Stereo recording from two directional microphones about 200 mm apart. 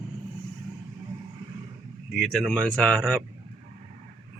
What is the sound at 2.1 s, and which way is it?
Speech, centre (ahead or behind).